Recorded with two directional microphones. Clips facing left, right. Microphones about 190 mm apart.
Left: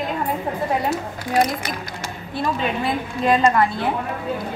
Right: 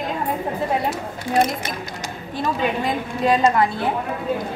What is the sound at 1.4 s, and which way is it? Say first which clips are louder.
Speech: even; 25° right (ahead or behind).